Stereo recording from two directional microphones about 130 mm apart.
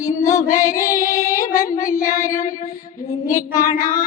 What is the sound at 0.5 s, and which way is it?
Child singing, 25° left (ahead or behind).